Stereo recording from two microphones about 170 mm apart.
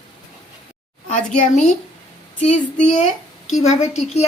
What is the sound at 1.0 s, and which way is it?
A child's voice, 45° left (ahead or behind).